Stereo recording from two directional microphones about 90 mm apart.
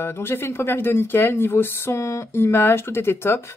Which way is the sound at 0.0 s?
25° left (ahead or behind).